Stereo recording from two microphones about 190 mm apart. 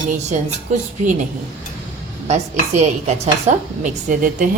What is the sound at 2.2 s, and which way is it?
A woman's voice, 35° right (ahead or behind).